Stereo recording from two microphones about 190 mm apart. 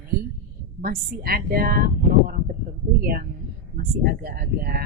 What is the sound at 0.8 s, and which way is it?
A woman's voice, 50° right (ahead or behind).